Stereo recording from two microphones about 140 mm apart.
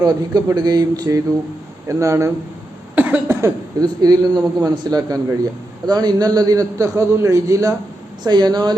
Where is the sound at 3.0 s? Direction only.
10° right (ahead or behind).